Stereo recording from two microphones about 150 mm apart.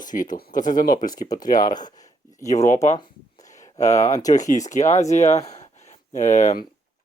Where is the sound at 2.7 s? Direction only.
50° left (ahead or behind).